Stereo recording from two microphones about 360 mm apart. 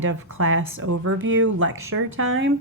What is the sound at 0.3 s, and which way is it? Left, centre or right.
A woman's voice, right.